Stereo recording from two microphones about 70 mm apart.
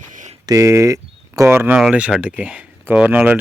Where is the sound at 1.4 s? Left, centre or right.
Right.